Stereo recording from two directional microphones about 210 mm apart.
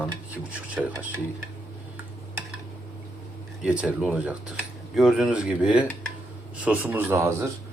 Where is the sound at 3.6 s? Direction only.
5° right (ahead or behind).